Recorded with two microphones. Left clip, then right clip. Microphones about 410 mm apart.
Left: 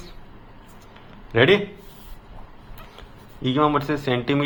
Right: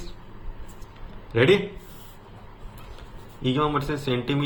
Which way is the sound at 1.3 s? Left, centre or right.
Centre.